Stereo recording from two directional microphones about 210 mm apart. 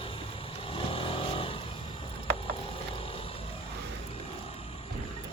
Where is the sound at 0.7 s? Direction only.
25° left (ahead or behind).